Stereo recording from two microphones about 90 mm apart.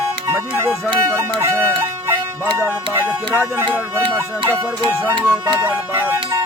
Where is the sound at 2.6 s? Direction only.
30° right (ahead or behind).